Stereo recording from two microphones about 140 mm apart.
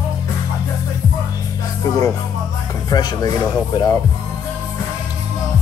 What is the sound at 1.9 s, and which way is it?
Speech, 25° left (ahead or behind).